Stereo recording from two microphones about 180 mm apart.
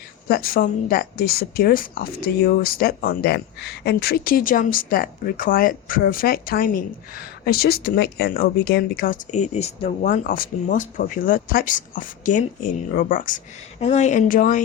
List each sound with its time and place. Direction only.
0.3 s speech: 55° left (ahead or behind); by 9.9 s 35° left (ahead or behind)
10.0 s speech: 50° left (ahead or behind)